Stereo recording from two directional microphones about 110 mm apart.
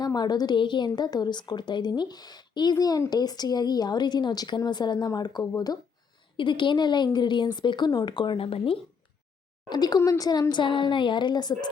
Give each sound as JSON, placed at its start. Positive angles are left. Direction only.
{"t": 0.0, "sound": "a woman's voice", "side_deg": 40}
{"t": 6.3, "sound": "speech", "side_deg": 45}
{"t": 9.6, "sound": "a woman's voice", "side_deg": 40}
{"t": 10.5, "sound": "speech", "side_deg": 45}